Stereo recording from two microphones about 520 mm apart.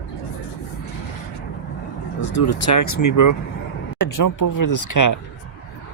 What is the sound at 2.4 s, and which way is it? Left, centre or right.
Speech, left.